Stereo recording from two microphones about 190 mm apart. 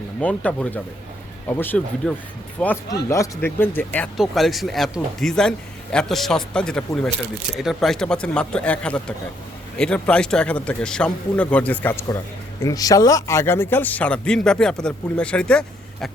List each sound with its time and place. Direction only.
0.2 s speech: 5° left (ahead or behind)